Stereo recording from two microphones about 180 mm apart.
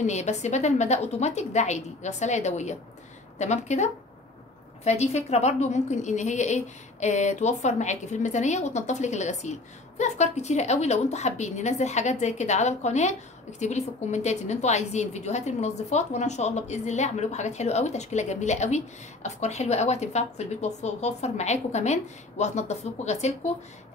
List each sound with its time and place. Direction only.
0.0 s a woman's voice: 40° left (ahead or behind)